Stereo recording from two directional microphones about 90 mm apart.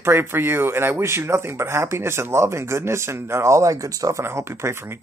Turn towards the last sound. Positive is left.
turn(degrees=-30)  # may be behind; listen again after turning